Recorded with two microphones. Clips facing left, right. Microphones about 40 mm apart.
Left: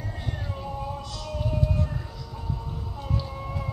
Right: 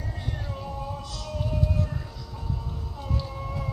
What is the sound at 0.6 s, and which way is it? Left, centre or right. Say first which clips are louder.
Music: left 1 dB; centre.